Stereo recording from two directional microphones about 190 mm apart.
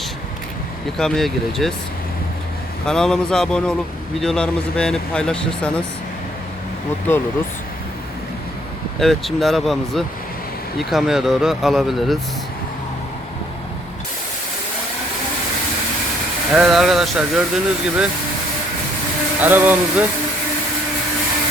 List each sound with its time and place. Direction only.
0.9 s speech: centre (ahead or behind)
2.8 s speech: 5° left (ahead or behind)
7.1 s speech: 10° left (ahead or behind)
9.0 s speech: centre (ahead or behind)
16.5 s speech: 5° right (ahead or behind)
19.4 s speech: 10° right (ahead or behind)